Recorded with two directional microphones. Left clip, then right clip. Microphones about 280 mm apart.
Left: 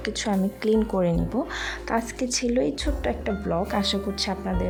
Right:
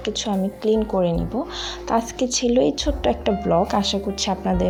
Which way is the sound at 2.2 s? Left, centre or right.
Left.